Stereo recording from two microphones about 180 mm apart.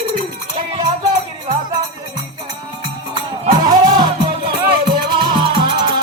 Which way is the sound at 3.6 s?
20° right (ahead or behind).